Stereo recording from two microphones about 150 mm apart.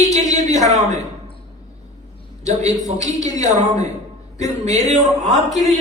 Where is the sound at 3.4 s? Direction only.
50° right (ahead or behind).